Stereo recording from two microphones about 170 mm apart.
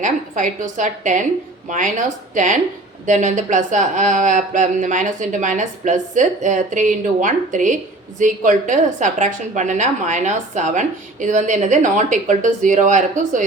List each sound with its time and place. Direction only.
0.0 s a woman's voice: 50° right (ahead or behind)